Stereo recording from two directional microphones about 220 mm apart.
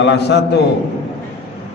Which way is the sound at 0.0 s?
50° left (ahead or behind).